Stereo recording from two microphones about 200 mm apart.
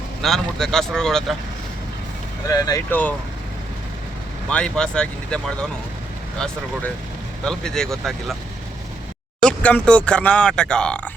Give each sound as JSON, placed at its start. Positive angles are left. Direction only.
{"t": 0.2, "sound": "speech", "side_deg": 0}
{"t": 2.5, "sound": "speech", "side_deg": 15}
{"t": 4.4, "sound": "speech", "side_deg": 5}
{"t": 7.4, "sound": "speech", "side_deg": 5}
{"t": 9.4, "sound": "speech", "side_deg": 5}